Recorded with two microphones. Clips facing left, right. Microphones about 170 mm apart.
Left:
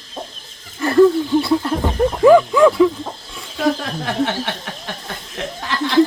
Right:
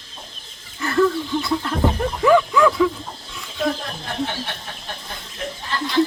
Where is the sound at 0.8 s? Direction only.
30° left (ahead or behind).